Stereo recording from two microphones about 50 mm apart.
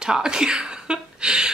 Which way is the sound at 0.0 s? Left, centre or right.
Centre.